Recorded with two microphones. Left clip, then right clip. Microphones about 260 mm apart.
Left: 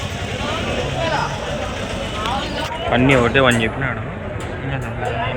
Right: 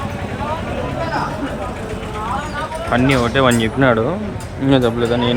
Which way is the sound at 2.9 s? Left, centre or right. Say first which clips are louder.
Left 1 dB; centre.